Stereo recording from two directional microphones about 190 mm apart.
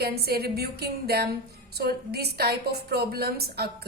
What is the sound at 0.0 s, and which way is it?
A woman's voice, 55° right (ahead or behind).